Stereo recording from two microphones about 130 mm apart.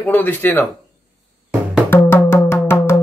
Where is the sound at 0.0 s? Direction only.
15° left (ahead or behind).